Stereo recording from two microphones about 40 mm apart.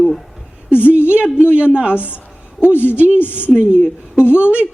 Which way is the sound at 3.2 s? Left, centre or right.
Left.